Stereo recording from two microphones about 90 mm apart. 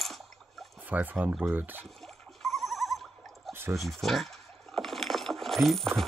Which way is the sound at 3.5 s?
30° right (ahead or behind).